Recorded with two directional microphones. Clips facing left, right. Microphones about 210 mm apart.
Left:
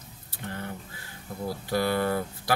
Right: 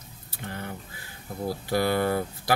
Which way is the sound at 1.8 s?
20° right (ahead or behind).